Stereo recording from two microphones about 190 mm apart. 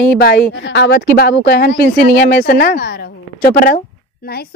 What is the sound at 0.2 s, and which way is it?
A woman's voice, 55° left (ahead or behind).